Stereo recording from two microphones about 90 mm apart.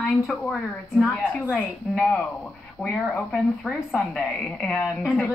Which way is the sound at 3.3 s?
5° right (ahead or behind).